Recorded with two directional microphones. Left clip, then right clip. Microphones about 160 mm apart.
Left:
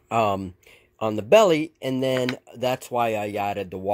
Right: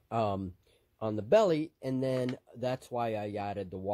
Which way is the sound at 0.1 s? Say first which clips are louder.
Left 10 dB; 10° left (ahead or behind).